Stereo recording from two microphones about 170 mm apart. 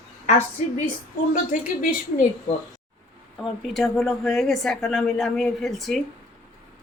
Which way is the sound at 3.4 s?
Centre (ahead or behind).